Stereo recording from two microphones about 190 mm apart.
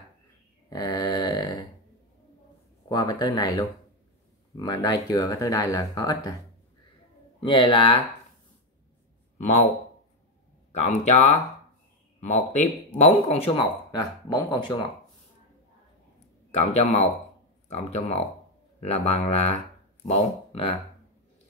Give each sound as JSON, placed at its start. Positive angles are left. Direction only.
{"t": 0.7, "sound": "a sound", "side_deg": 20}
{"t": 2.9, "sound": "speech", "side_deg": 20}
{"t": 7.3, "sound": "speech", "side_deg": 25}
{"t": 9.4, "sound": "a man's voice", "side_deg": 35}
{"t": 10.7, "sound": "a man's voice", "side_deg": 35}
{"t": 12.9, "sound": "speech", "side_deg": 35}
{"t": 16.5, "sound": "a man's voice", "side_deg": 35}